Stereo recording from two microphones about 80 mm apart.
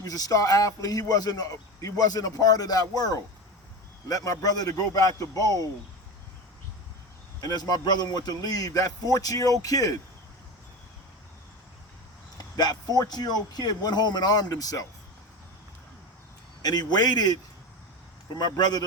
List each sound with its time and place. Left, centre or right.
0.0 s speech: left
7.4 s speech: left
12.4 s speech: left
16.6 s speech: left